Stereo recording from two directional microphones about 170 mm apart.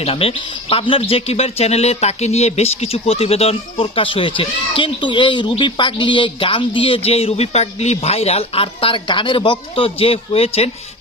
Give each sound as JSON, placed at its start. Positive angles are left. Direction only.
{"t": 0.0, "sound": "a man's voice", "side_deg": 35}